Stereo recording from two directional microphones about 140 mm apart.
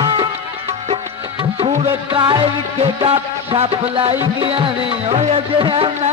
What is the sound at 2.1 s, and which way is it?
Music, 35° right (ahead or behind).